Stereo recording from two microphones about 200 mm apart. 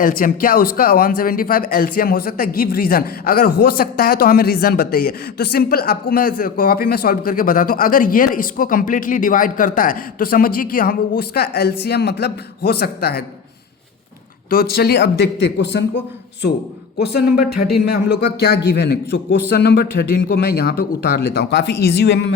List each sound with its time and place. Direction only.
0.0 s speech: 45° left (ahead or behind)
14.5 s a man's voice: 50° left (ahead or behind)
17.0 s speech: 55° left (ahead or behind)